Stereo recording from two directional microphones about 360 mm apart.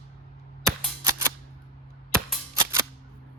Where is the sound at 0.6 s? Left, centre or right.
Centre.